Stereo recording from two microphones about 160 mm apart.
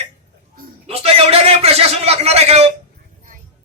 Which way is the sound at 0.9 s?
40° right (ahead or behind).